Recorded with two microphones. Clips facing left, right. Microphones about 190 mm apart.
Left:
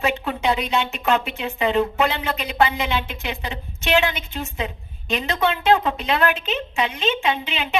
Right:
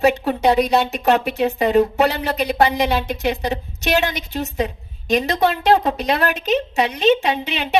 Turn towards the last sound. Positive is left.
turn(degrees=-40)  # may be behind; listen again after turning